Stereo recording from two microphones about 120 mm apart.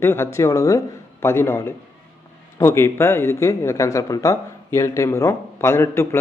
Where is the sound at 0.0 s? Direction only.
20° left (ahead or behind).